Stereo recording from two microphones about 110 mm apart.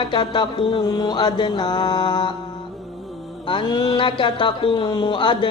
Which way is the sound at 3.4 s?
45° left (ahead or behind).